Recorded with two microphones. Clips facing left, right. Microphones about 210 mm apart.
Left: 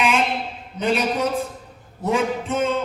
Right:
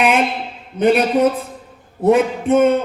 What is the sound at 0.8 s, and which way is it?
A man's voice, 55° right (ahead or behind).